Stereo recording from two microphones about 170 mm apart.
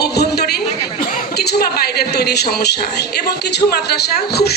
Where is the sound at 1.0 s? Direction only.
55° left (ahead or behind).